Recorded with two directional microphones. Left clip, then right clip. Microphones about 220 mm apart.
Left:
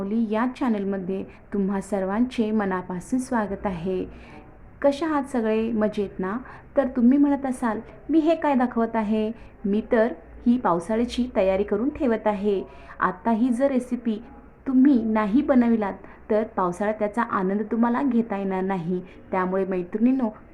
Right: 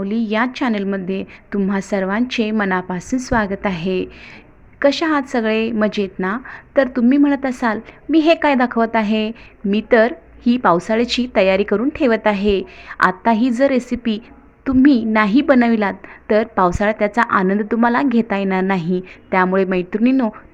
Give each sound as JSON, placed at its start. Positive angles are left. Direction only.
{"t": 0.0, "sound": "a woman's voice", "side_deg": -15}